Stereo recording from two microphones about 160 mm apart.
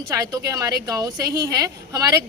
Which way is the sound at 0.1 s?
20° right (ahead or behind).